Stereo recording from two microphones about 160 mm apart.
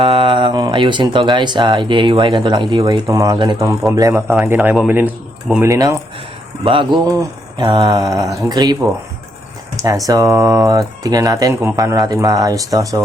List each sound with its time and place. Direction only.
0.0 s speech: 30° right (ahead or behind)